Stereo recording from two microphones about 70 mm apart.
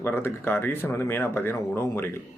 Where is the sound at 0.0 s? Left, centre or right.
Left.